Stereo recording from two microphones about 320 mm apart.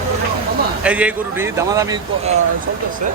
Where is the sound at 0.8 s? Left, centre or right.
Centre.